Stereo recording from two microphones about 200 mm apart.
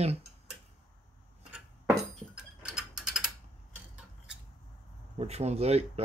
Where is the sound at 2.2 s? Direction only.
5° right (ahead or behind).